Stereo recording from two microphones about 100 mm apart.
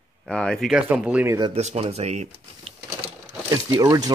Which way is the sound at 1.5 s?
90° right.